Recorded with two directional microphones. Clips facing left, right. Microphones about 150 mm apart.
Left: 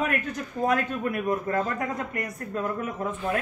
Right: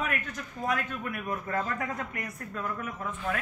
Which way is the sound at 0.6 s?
35° left (ahead or behind).